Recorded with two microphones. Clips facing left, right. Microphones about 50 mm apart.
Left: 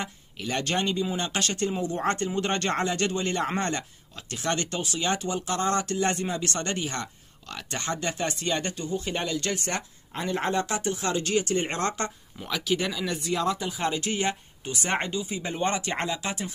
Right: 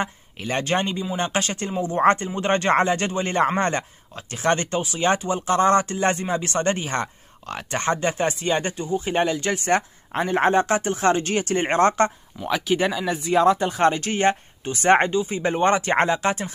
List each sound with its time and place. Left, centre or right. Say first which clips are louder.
0.0 s a man's voice: right 6 dB; right
13.0 s speech: right 5 dB; centre
13.3 s speech: right 11 dB; right